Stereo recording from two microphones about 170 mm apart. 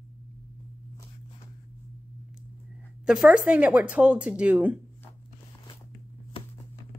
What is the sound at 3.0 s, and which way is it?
Speech, 5° right (ahead or behind).